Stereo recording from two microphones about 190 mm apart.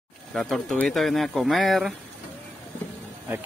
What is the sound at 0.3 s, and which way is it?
Speech, centre (ahead or behind).